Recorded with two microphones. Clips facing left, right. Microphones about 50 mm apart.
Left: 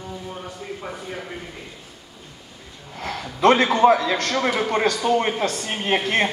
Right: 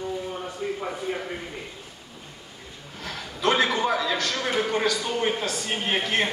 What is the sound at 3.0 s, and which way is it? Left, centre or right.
Speech, left.